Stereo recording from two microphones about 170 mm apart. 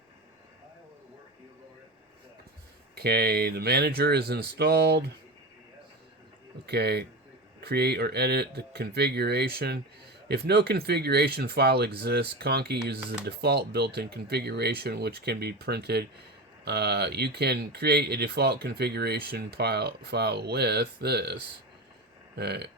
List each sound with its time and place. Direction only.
2.9 s speech: 70° right (ahead or behind)
6.7 s speech: 70° right (ahead or behind)